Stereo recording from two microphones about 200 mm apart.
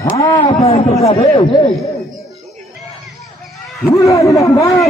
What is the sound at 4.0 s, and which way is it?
Speech, 15° left (ahead or behind).